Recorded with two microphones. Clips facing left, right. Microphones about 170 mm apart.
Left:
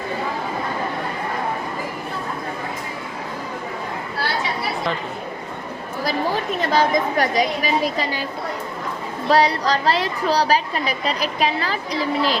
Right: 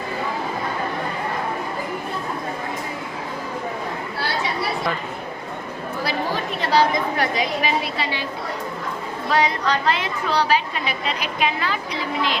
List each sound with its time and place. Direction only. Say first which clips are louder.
6.1 s a woman's voice: left 4 dB; 45° left (ahead or behind)
9.3 s a woman's voice: left 3 dB; 35° left (ahead or behind)